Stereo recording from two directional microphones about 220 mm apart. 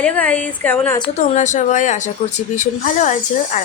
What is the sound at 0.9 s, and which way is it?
A woman's voice, 25° left (ahead or behind).